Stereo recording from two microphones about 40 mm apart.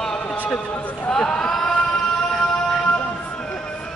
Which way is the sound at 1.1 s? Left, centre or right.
Centre.